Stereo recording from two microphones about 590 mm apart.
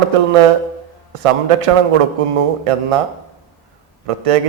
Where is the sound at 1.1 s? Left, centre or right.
Right.